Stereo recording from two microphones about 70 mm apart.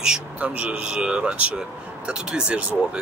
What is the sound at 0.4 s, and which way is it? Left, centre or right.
Speech, centre.